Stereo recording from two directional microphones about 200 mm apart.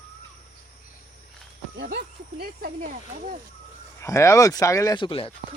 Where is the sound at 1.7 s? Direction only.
55° right (ahead or behind).